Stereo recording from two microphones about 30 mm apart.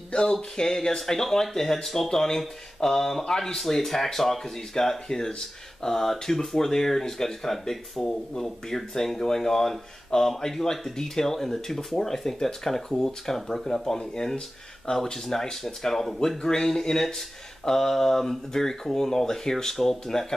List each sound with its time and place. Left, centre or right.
0.1 s speech: left
13.9 s speech: left
14.9 s speech: left
15.5 s speech: centre
16.2 s speech: left
17.6 s speech: centre
20.1 s speech: centre